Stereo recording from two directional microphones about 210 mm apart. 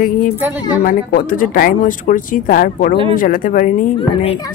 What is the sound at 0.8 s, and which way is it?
Speech, 40° left (ahead or behind).